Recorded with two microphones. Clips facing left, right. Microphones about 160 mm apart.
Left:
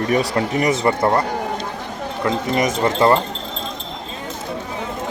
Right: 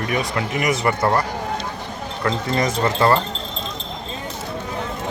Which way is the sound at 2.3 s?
15° left (ahead or behind).